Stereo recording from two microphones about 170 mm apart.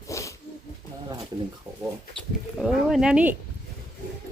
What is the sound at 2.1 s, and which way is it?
Speech, centre (ahead or behind).